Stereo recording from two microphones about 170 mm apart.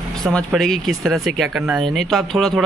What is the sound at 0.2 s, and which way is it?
Speech, 5° left (ahead or behind).